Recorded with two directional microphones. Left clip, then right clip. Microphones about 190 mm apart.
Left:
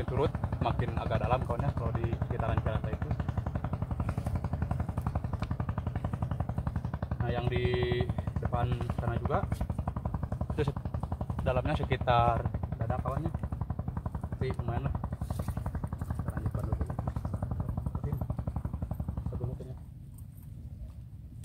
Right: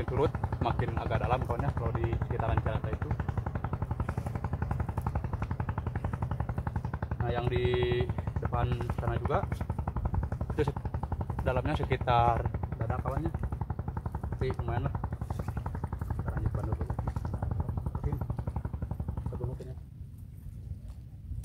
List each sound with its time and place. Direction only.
0.2 s speech: centre (ahead or behind)
6.0 s vehicle: 15° right (ahead or behind)
7.2 s speech: centre (ahead or behind)
10.6 s speech: centre (ahead or behind)
14.4 s speech: centre (ahead or behind)